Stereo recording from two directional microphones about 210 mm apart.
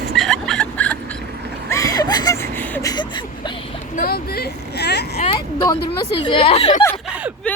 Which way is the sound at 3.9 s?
45° left (ahead or behind).